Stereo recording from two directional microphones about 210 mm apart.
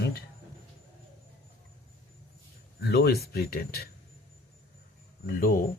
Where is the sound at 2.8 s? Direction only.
50° left (ahead or behind).